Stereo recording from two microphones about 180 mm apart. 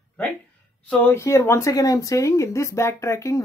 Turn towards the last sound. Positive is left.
turn(degrees=15)  # may be behind; listen again after turning